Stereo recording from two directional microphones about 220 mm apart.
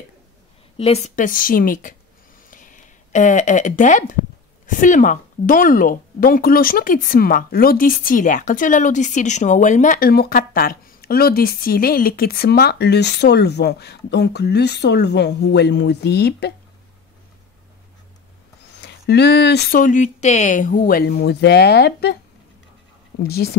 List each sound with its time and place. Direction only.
0.7 s speech: 30° left (ahead or behind); by 16.5 s 45° left (ahead or behind)
19.0 s speech: 50° left (ahead or behind)
23.2 s speech: 45° left (ahead or behind)